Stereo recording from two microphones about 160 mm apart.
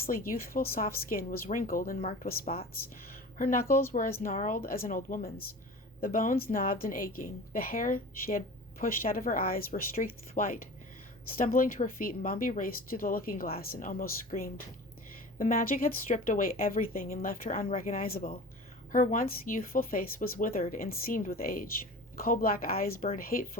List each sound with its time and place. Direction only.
0.0 s a woman's voice: 65° left (ahead or behind)
18.9 s a woman's voice: 55° left (ahead or behind)